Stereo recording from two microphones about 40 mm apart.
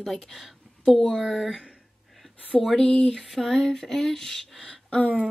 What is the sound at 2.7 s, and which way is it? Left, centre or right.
Speech, left.